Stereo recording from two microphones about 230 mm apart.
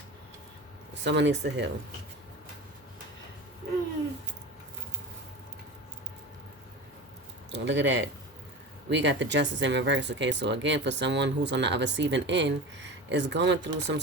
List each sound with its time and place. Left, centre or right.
1.0 s speech: right
7.5 s speech: right